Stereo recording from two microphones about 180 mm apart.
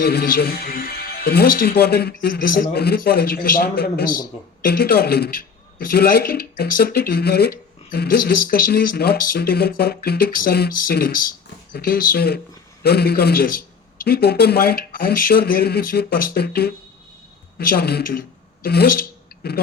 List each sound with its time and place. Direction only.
0.0 s speech: 60° left (ahead or behind)